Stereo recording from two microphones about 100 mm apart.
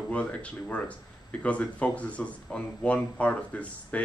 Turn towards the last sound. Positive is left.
turn(degrees=15)  # may be behind; listen again after turning